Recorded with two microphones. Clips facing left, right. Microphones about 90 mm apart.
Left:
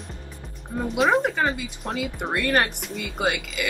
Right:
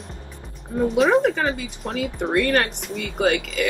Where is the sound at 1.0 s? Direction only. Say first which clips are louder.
Right 2 dB; centre (ahead or behind).